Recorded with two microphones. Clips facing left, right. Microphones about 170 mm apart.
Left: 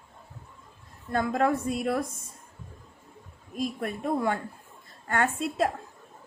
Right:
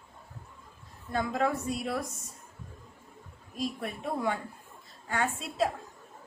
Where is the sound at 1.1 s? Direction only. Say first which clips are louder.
Left 4 dB; 50° left (ahead or behind).